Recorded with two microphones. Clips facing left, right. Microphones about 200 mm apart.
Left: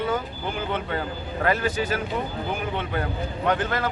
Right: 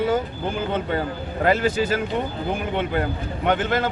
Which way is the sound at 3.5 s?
25° right (ahead or behind).